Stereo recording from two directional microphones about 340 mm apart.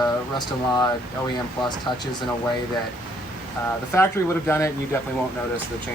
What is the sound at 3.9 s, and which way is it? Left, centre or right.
Speech, centre.